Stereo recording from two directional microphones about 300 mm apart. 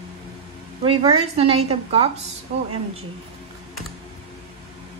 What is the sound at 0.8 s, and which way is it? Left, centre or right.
A woman's voice, centre.